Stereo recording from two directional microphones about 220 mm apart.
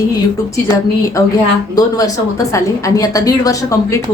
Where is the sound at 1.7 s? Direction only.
15° left (ahead or behind).